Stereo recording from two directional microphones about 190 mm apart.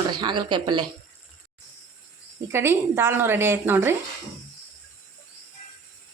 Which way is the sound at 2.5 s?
15° right (ahead or behind).